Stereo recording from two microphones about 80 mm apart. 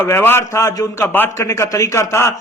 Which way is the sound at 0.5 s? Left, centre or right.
Left.